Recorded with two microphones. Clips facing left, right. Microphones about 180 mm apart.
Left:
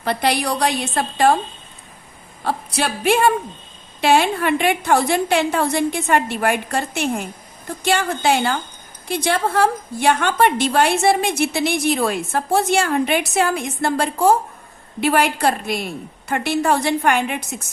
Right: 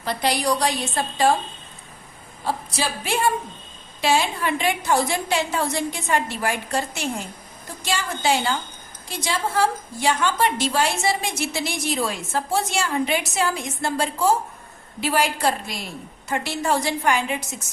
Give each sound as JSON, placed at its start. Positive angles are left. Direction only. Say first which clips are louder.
{"t": 0.0, "sound": "a woman's voice", "louder": "left 3 dB", "side_deg": 60}
{"t": 2.4, "sound": "a woman's voice", "louder": "left 4 dB", "side_deg": 65}